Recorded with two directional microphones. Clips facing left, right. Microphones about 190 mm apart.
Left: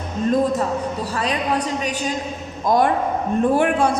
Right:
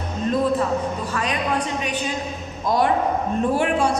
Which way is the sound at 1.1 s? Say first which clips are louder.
Left 3 dB; 35° left (ahead or behind).